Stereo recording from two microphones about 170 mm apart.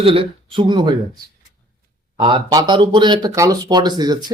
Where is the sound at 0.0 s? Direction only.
30° right (ahead or behind).